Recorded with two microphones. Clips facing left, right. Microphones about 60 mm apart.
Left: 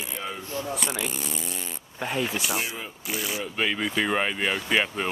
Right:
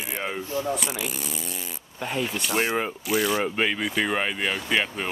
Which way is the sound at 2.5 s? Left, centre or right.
Right.